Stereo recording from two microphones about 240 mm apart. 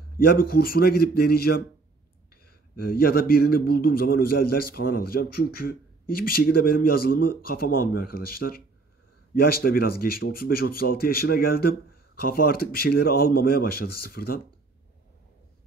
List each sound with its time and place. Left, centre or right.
0.2 s speech: left
2.9 s speech: left